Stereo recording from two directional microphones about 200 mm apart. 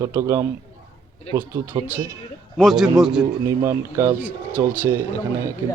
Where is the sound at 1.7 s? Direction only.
25° right (ahead or behind).